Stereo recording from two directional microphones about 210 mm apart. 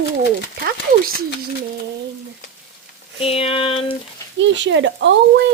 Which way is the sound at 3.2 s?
25° left (ahead or behind).